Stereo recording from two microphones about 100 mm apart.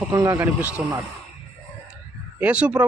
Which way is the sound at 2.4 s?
15° right (ahead or behind).